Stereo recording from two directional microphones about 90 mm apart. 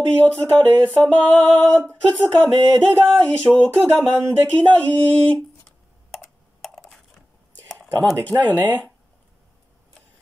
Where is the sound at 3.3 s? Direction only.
15° left (ahead or behind).